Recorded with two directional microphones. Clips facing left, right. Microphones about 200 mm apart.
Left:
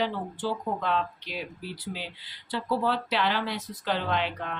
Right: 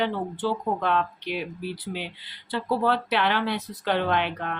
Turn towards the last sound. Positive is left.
turn(degrees=-55)  # may be behind; listen again after turning